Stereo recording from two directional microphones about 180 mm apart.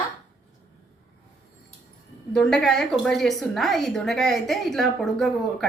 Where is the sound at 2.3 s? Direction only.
Centre (ahead or behind).